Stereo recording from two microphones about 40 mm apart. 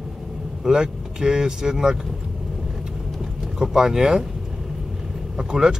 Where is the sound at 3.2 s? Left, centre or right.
Centre.